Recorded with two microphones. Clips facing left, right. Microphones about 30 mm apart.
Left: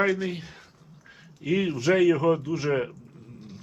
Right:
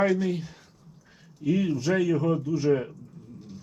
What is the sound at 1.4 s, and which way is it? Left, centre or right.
Speech, left.